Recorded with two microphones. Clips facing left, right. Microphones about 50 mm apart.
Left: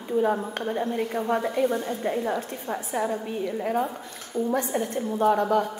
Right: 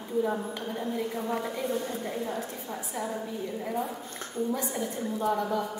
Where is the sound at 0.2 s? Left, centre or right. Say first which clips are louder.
Left 4 dB; left.